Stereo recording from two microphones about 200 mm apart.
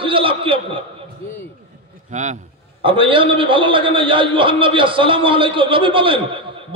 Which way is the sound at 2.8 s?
25° right (ahead or behind).